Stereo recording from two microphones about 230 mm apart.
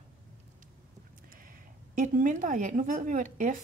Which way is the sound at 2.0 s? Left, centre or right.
Right.